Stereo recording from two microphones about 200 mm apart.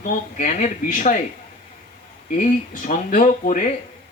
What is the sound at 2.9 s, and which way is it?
Speech, 40° left (ahead or behind).